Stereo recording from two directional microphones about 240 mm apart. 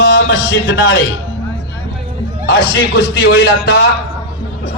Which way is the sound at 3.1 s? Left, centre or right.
Left.